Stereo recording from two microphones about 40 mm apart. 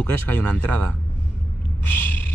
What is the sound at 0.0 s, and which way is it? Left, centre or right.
Speech, left.